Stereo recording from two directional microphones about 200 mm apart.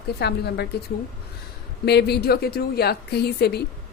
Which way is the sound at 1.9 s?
55° left (ahead or behind).